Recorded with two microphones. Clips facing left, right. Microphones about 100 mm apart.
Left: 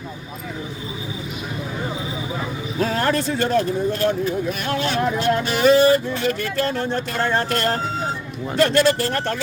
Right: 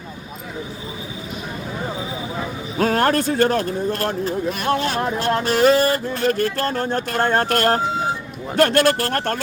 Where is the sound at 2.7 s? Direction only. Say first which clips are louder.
Right 3 dB; 55° right (ahead or behind).